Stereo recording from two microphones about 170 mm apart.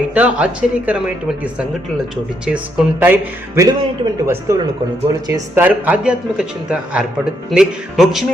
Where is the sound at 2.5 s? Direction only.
10° right (ahead or behind).